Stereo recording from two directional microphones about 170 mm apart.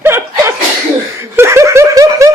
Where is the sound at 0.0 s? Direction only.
15° right (ahead or behind).